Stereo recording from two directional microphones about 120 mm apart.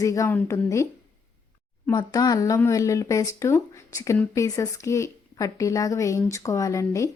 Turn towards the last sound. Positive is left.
turn(degrees=25)  # may be behind; listen again after turning